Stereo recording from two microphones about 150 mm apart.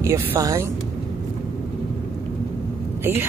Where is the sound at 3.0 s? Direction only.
15° right (ahead or behind).